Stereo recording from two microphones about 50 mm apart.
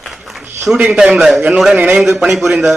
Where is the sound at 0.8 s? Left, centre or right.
Centre.